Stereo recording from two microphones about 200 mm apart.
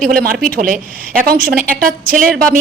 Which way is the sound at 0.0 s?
50° right (ahead or behind).